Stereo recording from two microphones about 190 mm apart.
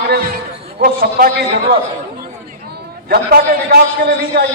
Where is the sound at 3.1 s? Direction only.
55° right (ahead or behind).